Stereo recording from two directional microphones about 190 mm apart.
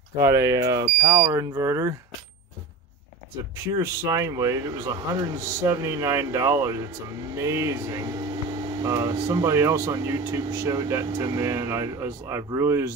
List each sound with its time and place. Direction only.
0.2 s speech: 15° right (ahead or behind)
3.7 s speech: 15° right (ahead or behind)